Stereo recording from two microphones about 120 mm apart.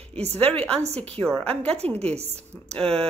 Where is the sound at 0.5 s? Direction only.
10° left (ahead or behind).